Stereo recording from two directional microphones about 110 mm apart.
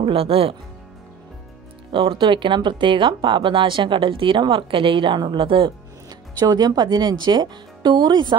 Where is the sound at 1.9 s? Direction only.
50° right (ahead or behind).